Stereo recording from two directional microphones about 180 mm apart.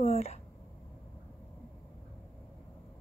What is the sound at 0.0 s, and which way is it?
Speech, 35° left (ahead or behind).